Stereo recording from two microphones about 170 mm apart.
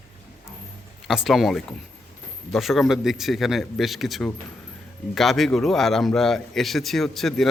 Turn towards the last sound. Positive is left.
turn(degrees=0)  # may be behind; listen again after turning